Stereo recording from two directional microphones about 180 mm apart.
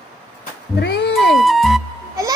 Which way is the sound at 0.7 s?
70° left (ahead or behind).